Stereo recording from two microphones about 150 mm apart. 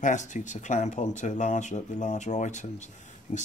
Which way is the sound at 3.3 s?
50° left (ahead or behind).